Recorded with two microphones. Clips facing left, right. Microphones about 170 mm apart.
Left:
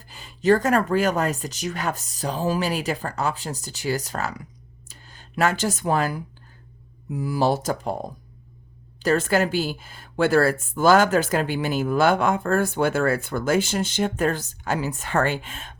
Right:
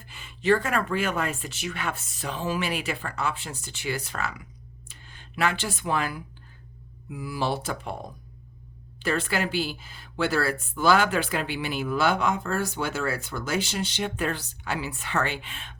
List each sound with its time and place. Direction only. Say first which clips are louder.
0.0 s speech: left 6 dB; 35° left (ahead or behind)